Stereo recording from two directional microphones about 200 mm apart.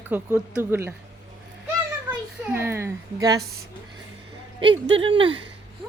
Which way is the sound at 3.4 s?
50° right (ahead or behind).